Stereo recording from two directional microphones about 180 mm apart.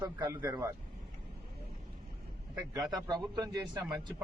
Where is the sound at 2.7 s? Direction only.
20° right (ahead or behind).